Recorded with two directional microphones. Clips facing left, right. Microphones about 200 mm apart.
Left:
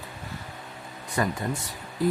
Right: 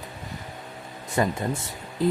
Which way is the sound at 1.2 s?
25° right (ahead or behind).